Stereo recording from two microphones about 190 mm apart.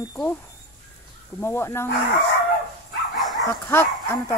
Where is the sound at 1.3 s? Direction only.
15° left (ahead or behind).